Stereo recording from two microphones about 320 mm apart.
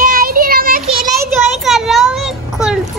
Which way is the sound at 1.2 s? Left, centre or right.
Centre.